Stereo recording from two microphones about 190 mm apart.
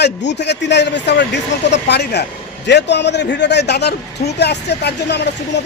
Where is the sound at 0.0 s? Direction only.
65° left (ahead or behind).